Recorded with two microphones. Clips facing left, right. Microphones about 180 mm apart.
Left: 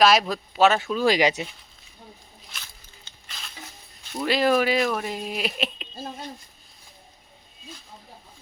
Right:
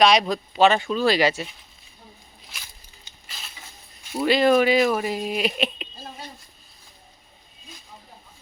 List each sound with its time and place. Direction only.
0.0 s speech: 5° left (ahead or behind)
2.5 s a sound: 15° right (ahead or behind)
4.1 s speech: 5° right (ahead or behind)